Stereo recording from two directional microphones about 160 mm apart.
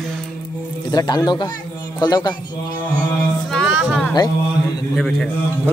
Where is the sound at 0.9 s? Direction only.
25° left (ahead or behind).